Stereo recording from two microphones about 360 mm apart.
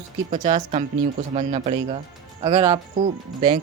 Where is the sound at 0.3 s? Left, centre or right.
Right.